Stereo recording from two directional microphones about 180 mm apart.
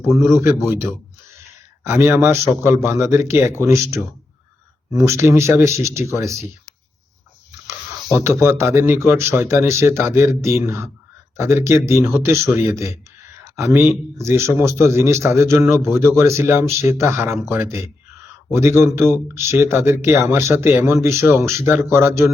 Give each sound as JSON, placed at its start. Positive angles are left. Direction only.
{"t": 0.2, "sound": "speech", "side_deg": -15}
{"t": 1.9, "sound": "speech", "side_deg": -15}
{"t": 7.7, "sound": "speech", "side_deg": -15}